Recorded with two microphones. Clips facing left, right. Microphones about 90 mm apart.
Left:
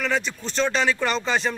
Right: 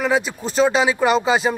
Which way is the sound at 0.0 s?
10° right (ahead or behind).